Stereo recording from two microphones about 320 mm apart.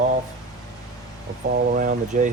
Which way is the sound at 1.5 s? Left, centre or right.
Right.